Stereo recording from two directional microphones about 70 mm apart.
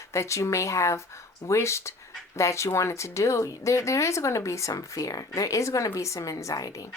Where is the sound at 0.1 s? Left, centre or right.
Left.